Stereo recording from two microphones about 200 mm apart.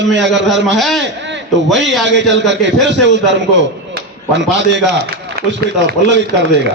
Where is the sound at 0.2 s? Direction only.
60° right (ahead or behind).